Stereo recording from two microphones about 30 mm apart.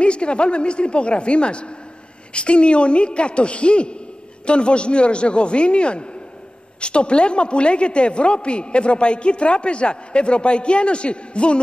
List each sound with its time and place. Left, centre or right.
0.0 s a woman's voice: left